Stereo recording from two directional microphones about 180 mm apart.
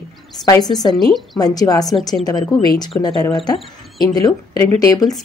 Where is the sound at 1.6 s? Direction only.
20° left (ahead or behind).